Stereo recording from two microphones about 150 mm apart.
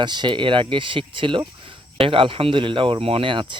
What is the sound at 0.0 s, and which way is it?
Speech, 30° right (ahead or behind).